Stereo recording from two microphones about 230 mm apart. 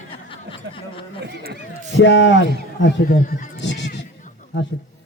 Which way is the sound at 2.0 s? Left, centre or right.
Left.